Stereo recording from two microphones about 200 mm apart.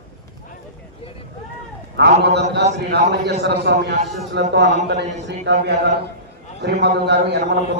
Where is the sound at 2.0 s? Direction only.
55° right (ahead or behind).